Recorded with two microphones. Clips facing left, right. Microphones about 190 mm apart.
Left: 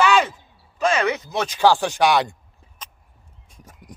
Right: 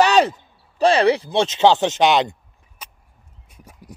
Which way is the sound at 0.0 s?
40° right (ahead or behind).